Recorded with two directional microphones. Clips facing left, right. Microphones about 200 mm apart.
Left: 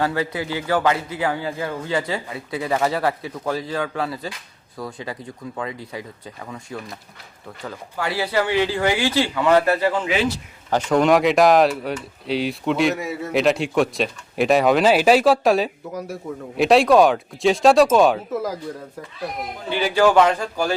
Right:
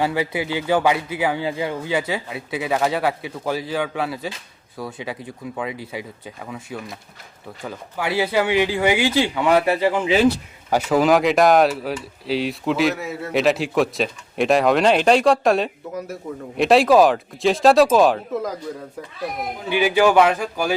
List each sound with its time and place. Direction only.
0.0 s a man's voice: 15° right (ahead or behind)
7.6 s a man's voice: 15° right (ahead or behind)
19.7 s a man's voice: 10° right (ahead or behind)